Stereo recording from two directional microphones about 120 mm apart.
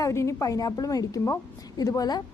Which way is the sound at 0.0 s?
25° left (ahead or behind).